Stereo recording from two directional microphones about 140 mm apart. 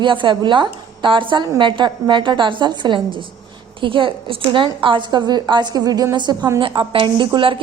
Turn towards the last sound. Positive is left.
turn(degrees=-40)  # may be behind; listen again after turning